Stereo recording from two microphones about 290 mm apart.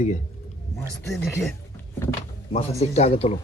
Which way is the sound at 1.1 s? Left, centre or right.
Centre.